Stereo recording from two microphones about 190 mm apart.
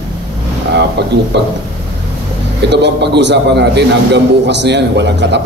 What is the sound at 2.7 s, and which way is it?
A man's voice, 65° right (ahead or behind).